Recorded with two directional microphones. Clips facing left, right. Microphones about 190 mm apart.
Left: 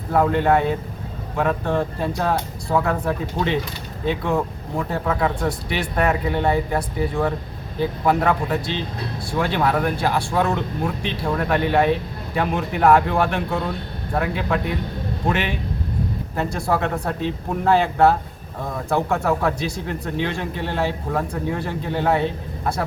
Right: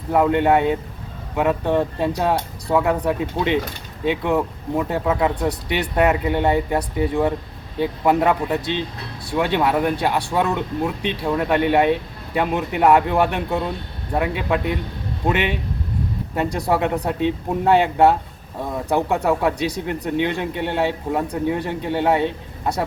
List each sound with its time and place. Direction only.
0.1 s speech: 15° right (ahead or behind)
16.3 s speech: 15° right (ahead or behind)